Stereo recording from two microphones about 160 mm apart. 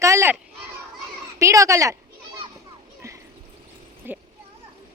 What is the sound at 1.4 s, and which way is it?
Speech, 20° right (ahead or behind).